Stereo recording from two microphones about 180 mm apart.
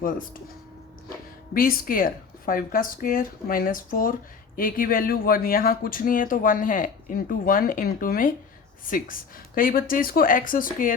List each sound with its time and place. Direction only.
1.5 s speech: 55° left (ahead or behind)